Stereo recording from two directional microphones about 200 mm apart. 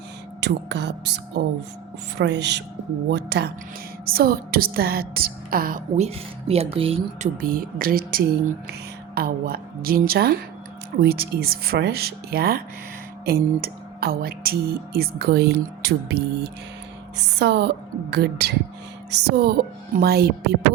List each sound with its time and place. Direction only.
0.3 s speech: 60° right (ahead or behind); by 7.3 s 30° right (ahead or behind)
7.4 s speech: 45° right (ahead or behind)